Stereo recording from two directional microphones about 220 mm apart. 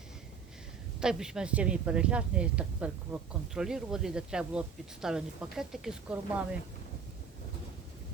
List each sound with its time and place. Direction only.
1.0 s speech: 5° right (ahead or behind)